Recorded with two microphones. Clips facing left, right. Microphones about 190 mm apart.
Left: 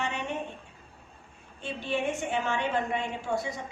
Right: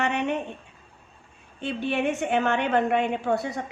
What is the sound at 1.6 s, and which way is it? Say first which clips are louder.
A woman's voice: right 5 dB; 65° right (ahead or behind).